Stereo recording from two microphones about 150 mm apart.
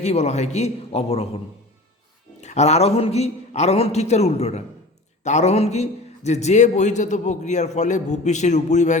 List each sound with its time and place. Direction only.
0.0 s a man's voice: 50° left (ahead or behind)
2.4 s a man's voice: 50° left (ahead or behind)